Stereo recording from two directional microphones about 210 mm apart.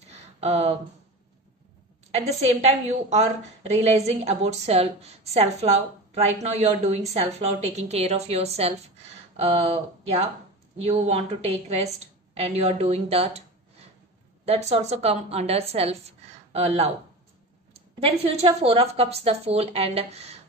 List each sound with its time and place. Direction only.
0.4 s a woman's voice: 30° right (ahead or behind)
2.0 s a woman's voice: 30° right (ahead or behind)